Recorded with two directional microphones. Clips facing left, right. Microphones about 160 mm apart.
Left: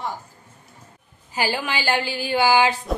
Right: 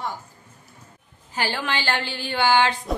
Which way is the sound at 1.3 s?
10° left (ahead or behind).